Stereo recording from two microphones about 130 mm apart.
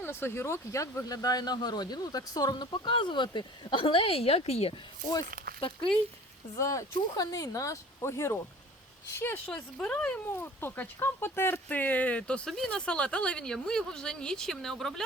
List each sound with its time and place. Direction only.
0.0 s speech: 15° left (ahead or behind); by 5.9 s 40° left (ahead or behind)
6.6 s speech: 25° left (ahead or behind); by 15.0 s centre (ahead or behind)